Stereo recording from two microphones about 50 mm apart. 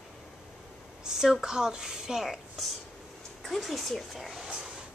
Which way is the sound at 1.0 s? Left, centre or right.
Centre.